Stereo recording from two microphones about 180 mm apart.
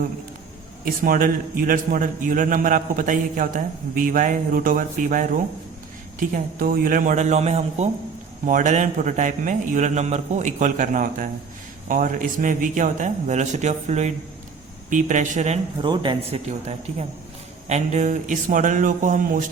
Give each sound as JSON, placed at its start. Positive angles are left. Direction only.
{"t": 1.0, "sound": "a man's voice", "side_deg": -55}
{"t": 15.8, "sound": "speech", "side_deg": -25}
{"t": 17.7, "sound": "a man's voice", "side_deg": -40}